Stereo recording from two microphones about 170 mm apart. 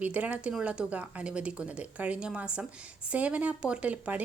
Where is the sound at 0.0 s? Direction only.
10° right (ahead or behind).